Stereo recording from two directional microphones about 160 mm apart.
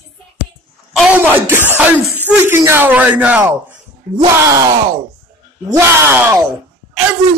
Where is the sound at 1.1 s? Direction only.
10° right (ahead or behind).